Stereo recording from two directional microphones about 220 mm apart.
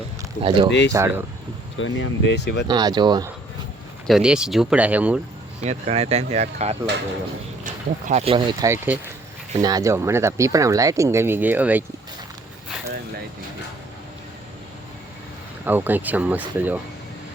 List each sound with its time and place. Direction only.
0.4 s speech: 25° right (ahead or behind)
0.9 s speech: 10° right (ahead or behind)
1.8 s speech: 60° left (ahead or behind)
2.6 s speech: 20° right (ahead or behind)
4.0 s speech: centre (ahead or behind)
5.6 s speech: 30° right (ahead or behind)
8.6 s speech: 10° right (ahead or behind)
15.6 s speech: 10° right (ahead or behind)